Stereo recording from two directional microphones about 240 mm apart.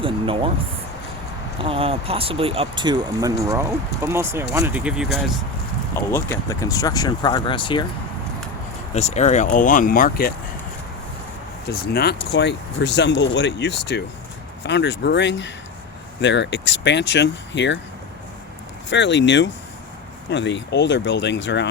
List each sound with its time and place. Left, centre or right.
0.0 s speech: right
1.6 s speech: right; by 5.4 s centre
5.9 s speech: centre
9.0 s speech: left
11.7 s speech: left
18.9 s speech: left